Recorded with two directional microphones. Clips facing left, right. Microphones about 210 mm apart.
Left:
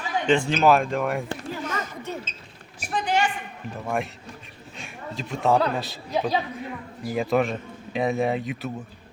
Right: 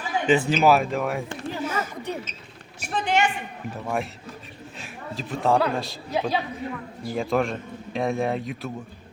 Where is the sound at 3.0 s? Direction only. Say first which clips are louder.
Right 1 dB; 25° right (ahead or behind).